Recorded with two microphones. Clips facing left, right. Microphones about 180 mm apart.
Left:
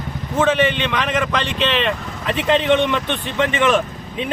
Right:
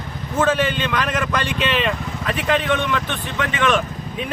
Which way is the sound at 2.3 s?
20° left (ahead or behind).